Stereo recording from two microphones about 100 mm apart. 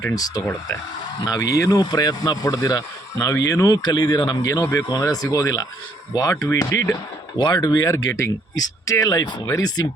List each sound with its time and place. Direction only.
0.0 s speech: 35° left (ahead or behind)
7.3 s speech: 45° left (ahead or behind)